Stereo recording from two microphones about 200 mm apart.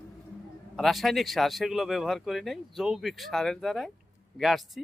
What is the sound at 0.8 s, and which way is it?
Speech, centre (ahead or behind).